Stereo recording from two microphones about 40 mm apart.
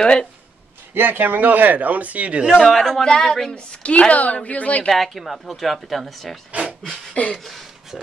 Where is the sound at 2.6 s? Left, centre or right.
Centre.